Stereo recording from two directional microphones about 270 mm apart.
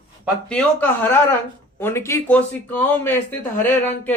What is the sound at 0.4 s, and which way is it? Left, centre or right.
Speech, centre.